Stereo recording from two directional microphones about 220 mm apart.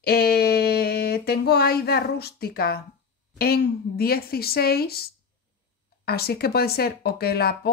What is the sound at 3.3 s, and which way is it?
Speech, 45° left (ahead or behind).